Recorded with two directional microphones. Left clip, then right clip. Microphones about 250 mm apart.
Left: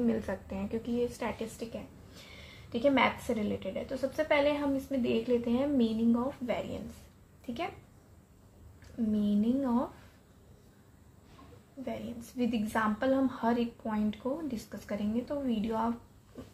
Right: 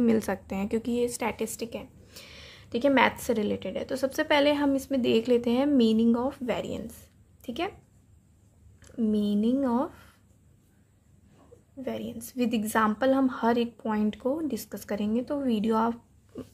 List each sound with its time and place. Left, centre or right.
0.0 s a woman's voice: right
9.1 s a woman's voice: right
11.8 s a woman's voice: right